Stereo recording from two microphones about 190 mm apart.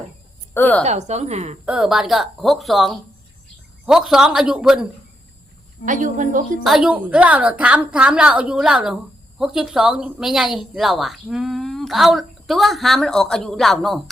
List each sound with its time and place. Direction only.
0.5 s a woman's voice: 10° left (ahead or behind)
0.9 s a woman's voice: 35° right (ahead or behind)
1.6 s a woman's voice: 5° right (ahead or behind)
5.8 s a woman's voice: 45° right (ahead or behind)
6.7 s a woman's voice: 5° right (ahead or behind)